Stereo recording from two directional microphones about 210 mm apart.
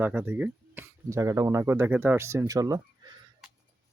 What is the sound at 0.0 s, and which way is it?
Speech, 10° right (ahead or behind).